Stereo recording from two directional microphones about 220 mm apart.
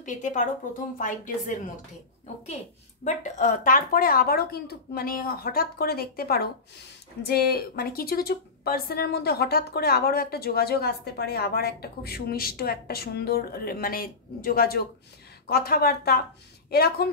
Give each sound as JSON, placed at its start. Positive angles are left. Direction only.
{"t": 0.0, "sound": "a woman's voice", "side_deg": 35}